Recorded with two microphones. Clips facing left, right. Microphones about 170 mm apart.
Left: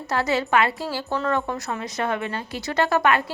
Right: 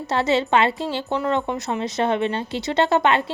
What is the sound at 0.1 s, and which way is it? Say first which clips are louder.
A woman's voice: right 2 dB; 25° right (ahead or behind).